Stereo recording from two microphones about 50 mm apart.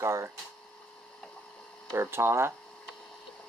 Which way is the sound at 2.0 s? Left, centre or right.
Right.